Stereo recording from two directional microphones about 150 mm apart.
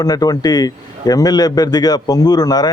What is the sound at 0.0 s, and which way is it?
Speech, 25° left (ahead or behind).